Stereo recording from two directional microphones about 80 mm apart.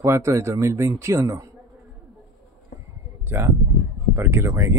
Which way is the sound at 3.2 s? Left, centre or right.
Right.